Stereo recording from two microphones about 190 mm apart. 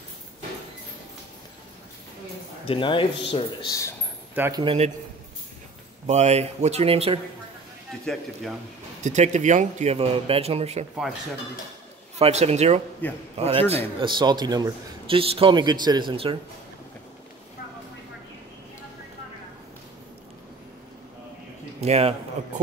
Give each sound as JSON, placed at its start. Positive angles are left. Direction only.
{"t": 2.6, "sound": "a man's voice", "side_deg": 30}
{"t": 4.4, "sound": "a man's voice", "side_deg": -20}
{"t": 6.0, "sound": "speech", "side_deg": -35}
{"t": 8.0, "sound": "speech", "side_deg": 5}
{"t": 9.0, "sound": "speech", "side_deg": -40}
{"t": 12.2, "sound": "a man's voice", "side_deg": -35}
{"t": 21.8, "sound": "speech", "side_deg": -30}